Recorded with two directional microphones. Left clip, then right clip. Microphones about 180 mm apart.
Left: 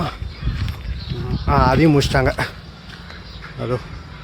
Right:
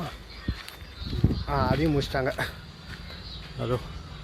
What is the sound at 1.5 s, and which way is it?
Speech, 20° left (ahead or behind).